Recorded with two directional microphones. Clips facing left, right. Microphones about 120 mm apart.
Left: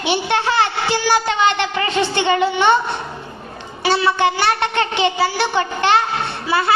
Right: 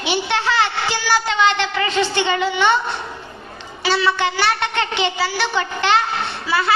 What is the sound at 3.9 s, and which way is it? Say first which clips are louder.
A woman's voice: left 3 dB; 50° left (ahead or behind).